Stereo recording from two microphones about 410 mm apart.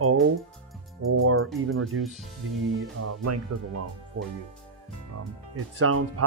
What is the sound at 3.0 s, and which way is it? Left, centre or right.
Speech, right.